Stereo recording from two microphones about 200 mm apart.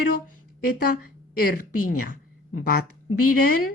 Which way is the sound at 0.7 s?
45° left (ahead or behind).